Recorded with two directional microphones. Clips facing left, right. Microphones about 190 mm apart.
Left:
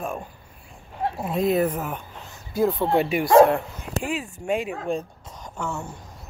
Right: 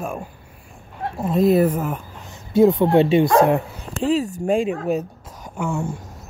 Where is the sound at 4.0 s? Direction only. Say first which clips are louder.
Right 10 dB; 35° right (ahead or behind).